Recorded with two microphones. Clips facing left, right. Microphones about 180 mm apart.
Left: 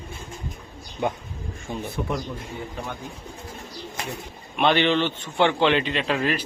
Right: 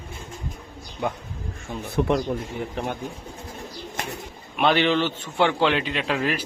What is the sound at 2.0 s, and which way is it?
Speech, 70° right (ahead or behind).